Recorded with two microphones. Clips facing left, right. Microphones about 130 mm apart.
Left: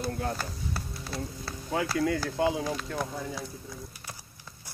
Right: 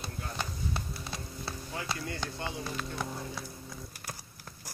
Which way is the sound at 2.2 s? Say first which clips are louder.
Left 10 dB; 90° left.